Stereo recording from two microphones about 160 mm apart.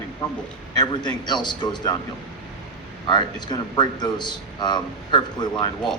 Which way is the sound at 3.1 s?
30° left (ahead or behind).